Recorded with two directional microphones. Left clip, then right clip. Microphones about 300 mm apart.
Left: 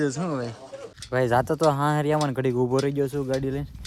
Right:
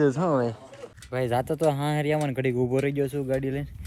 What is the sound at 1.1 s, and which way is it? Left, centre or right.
Speech, centre.